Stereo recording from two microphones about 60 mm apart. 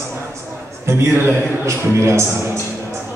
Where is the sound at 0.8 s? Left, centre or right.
Right.